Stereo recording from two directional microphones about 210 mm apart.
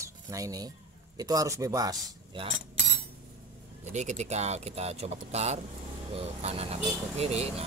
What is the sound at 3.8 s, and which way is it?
Speech, 35° right (ahead or behind).